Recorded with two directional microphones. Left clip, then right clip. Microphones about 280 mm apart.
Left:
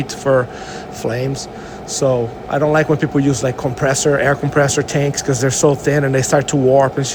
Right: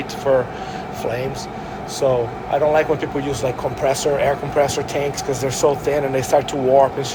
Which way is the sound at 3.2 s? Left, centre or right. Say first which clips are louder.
Left 3 dB; left.